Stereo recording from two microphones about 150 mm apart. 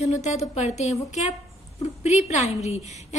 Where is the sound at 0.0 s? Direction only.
50° left (ahead or behind).